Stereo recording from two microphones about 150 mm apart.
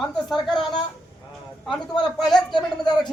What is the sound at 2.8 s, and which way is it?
Speech, 30° left (ahead or behind).